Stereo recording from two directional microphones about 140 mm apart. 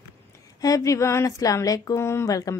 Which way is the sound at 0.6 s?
25° left (ahead or behind).